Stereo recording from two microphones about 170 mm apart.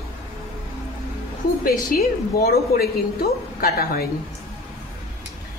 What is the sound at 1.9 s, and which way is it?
A woman's voice, 65° left (ahead or behind).